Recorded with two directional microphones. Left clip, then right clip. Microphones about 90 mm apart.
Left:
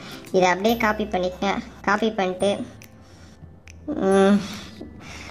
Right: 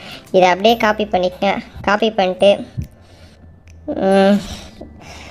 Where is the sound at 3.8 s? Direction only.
20° right (ahead or behind).